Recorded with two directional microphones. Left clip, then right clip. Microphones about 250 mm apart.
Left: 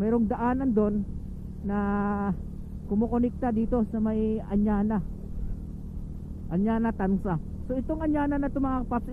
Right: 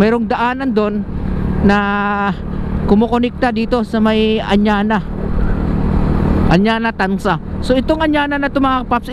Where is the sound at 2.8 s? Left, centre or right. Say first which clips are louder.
Right 15 dB; right.